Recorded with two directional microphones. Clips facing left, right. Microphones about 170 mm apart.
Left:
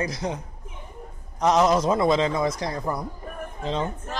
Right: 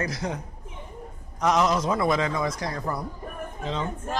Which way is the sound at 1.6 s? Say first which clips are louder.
Left 4 dB; 40° left (ahead or behind).